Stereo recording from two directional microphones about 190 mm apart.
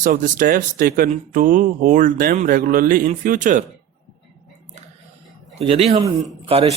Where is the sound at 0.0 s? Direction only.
45° right (ahead or behind).